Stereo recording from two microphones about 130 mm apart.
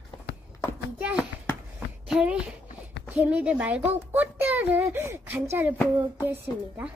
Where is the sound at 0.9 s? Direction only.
10° right (ahead or behind).